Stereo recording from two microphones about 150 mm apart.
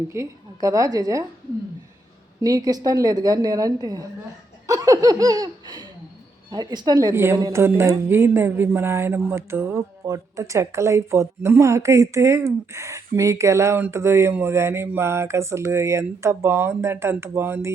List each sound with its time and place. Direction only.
0.1 s a woman's voice: 20° right (ahead or behind)
2.4 s a woman's voice: 25° right (ahead or behind)